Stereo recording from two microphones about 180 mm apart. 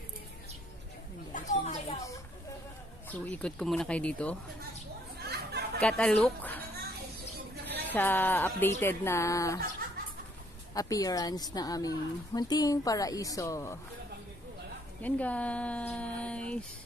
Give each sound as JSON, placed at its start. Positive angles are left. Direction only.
{"t": 1.3, "sound": "a sound", "side_deg": 40}
{"t": 3.1, "sound": "speech", "side_deg": 10}
{"t": 5.2, "sound": "chatter", "side_deg": -65}
{"t": 5.8, "sound": "speech", "side_deg": 5}
{"t": 7.9, "sound": "speech", "side_deg": 10}
{"t": 10.7, "sound": "speech", "side_deg": 20}
{"t": 15.0, "sound": "speech", "side_deg": 10}